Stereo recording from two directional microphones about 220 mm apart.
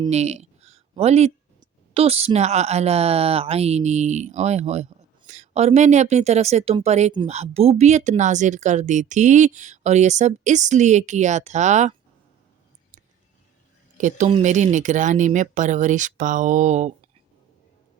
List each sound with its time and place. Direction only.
0.1 s a sound: 30° right (ahead or behind)
1.9 s a woman's voice: 30° right (ahead or behind)
14.0 s speech: 30° right (ahead or behind)